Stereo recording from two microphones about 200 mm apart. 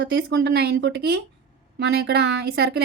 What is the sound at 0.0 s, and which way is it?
Speech, 60° right (ahead or behind).